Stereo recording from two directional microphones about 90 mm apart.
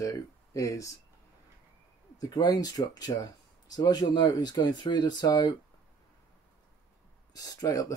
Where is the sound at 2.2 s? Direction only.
45° left (ahead or behind).